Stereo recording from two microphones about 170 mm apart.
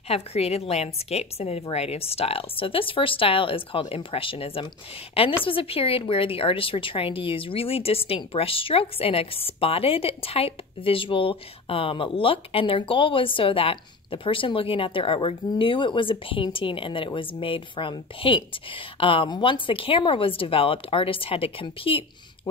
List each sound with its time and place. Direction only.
0.1 s speech: 35° left (ahead or behind)